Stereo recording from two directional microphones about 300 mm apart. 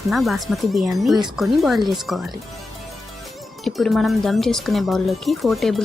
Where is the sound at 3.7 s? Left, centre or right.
Centre.